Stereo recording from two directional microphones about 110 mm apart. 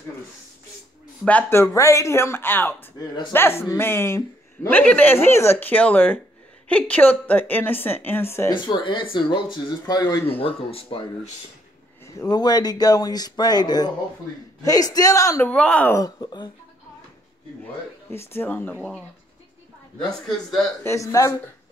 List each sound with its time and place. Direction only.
1.2 s a woman's voice: 10° left (ahead or behind)
1.6 s a woman's voice: 25° left (ahead or behind)
8.5 s speech: 45° left (ahead or behind)
10.4 s speech: 55° left (ahead or behind)
12.3 s speech: 40° left (ahead or behind)
15.4 s a woman's voice: 10° left (ahead or behind)
16.2 s speech: 40° left (ahead or behind)
18.1 s a woman's voice: 20° left (ahead or behind)
20.8 s speech: 25° left (ahead or behind)